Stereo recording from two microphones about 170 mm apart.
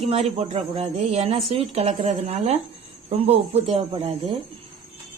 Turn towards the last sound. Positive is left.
turn(degrees=-35)  # may be behind; listen again after turning